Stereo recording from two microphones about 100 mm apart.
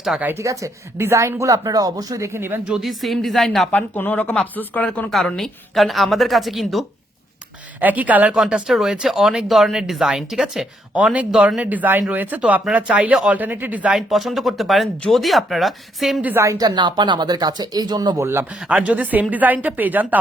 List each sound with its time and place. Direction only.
0.3 s speech: 30° right (ahead or behind)
2.6 s a woman's voice: 5° right (ahead or behind)
3.7 s a woman's voice: 15° left (ahead or behind); by 6.8 s centre (ahead or behind)
7.8 s speech: 15° right (ahead or behind)
14.1 s a woman's voice: centre (ahead or behind)
16.4 s speech: 30° right (ahead or behind)
16.6 s speech: 50° right (ahead or behind)
18.2 s a man's voice: 25° right (ahead or behind)
18.7 s speech: 15° right (ahead or behind)